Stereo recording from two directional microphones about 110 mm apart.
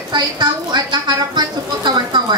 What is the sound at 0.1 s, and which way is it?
Speech, 40° right (ahead or behind).